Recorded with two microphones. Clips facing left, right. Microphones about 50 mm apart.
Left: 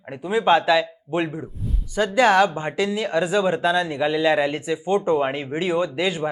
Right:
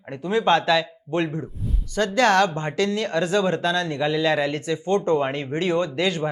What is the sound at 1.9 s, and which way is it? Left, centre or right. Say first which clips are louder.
Speech: left 2 dB; centre.